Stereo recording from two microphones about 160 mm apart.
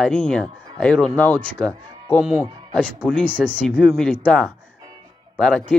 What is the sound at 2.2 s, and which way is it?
Speech, 5° right (ahead or behind).